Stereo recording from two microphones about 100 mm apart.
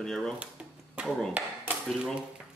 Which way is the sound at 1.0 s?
15° right (ahead or behind).